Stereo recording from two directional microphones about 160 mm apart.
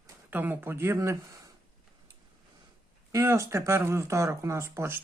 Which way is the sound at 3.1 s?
20° right (ahead or behind).